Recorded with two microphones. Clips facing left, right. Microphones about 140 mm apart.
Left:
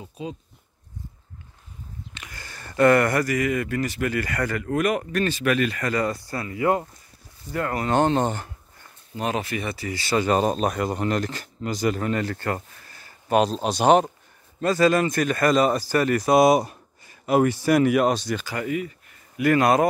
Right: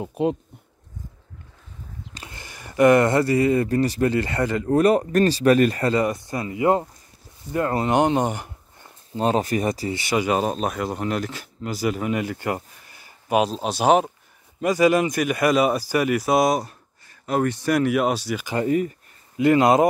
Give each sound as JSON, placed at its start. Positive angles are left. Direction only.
{"t": 0.0, "sound": "speech", "side_deg": -65}
{"t": 2.3, "sound": "speech", "side_deg": -15}
{"t": 5.9, "sound": "speech", "side_deg": -20}
{"t": 9.1, "sound": "speech", "side_deg": -35}
{"t": 9.8, "sound": "speech", "side_deg": -20}
{"t": 14.6, "sound": "speech", "side_deg": -15}
{"t": 18.7, "sound": "speech", "side_deg": -40}
{"t": 19.3, "sound": "speech", "side_deg": -20}